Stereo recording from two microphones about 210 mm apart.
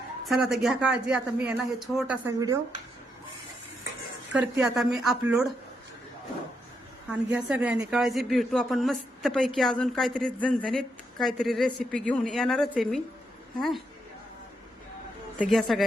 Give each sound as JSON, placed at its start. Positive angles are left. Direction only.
{"t": 0.3, "sound": "a woman's voice", "side_deg": 0}
{"t": 2.4, "sound": "speech", "side_deg": -15}
{"t": 4.3, "sound": "a woman's voice", "side_deg": -5}
{"t": 7.1, "sound": "a woman's voice", "side_deg": -5}
{"t": 15.4, "sound": "a woman's voice", "side_deg": 0}